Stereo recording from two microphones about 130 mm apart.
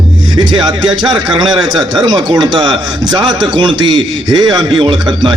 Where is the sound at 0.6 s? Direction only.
35° right (ahead or behind).